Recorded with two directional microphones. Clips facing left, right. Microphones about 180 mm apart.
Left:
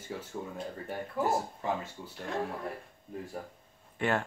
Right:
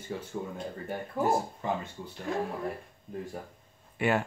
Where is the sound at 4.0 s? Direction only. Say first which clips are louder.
Right 3 dB; 10° right (ahead or behind).